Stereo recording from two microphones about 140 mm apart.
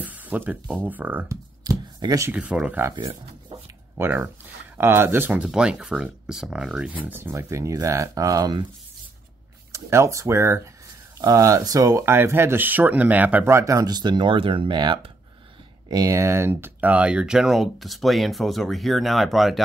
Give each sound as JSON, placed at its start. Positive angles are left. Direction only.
{"t": 0.0, "sound": "speech", "side_deg": -10}
{"t": 1.3, "sound": "shuffling cards", "side_deg": -25}
{"t": 2.3, "sound": "speech", "side_deg": -10}
{"t": 3.0, "sound": "speech", "side_deg": -35}
{"t": 3.9, "sound": "speech", "side_deg": -15}
{"t": 9.7, "sound": "speech", "side_deg": -20}
{"t": 13.6, "sound": "speech", "side_deg": -25}